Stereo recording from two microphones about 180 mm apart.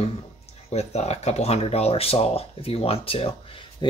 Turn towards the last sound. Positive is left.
turn(degrees=30)  # may be behind; listen again after turning